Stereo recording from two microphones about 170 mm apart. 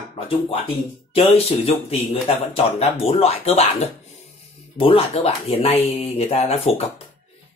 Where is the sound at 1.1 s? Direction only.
35° left (ahead or behind).